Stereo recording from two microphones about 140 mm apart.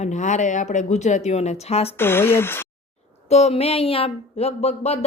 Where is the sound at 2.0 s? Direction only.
15° left (ahead or behind).